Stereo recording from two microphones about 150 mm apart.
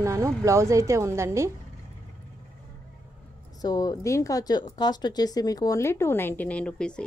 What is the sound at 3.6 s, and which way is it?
A woman's voice, 25° left (ahead or behind).